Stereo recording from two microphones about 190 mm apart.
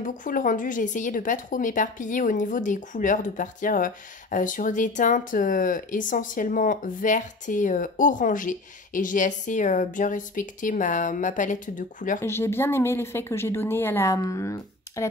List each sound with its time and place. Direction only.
0.0 s speech: 45° left (ahead or behind)
12.2 s a woman's voice: 15° left (ahead or behind)